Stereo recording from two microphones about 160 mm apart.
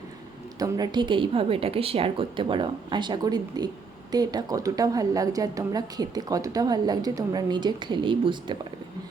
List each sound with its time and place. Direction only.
0.6 s a woman's voice: 25° right (ahead or behind)